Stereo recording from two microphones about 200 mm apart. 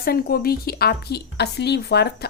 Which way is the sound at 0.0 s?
50° left (ahead or behind).